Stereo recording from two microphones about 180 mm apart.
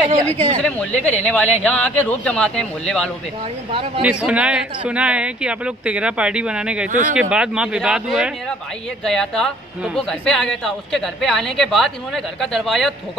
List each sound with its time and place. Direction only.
0.6 s speech: 5° left (ahead or behind)
4.0 s a woman's voice: 5° right (ahead or behind)
6.9 s speech: 45° right (ahead or behind)
7.2 s a woman's voice: 5° right (ahead or behind)